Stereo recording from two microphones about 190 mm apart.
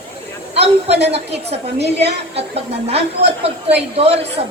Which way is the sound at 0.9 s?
35° right (ahead or behind).